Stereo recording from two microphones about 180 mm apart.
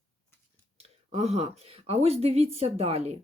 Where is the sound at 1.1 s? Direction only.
35° right (ahead or behind).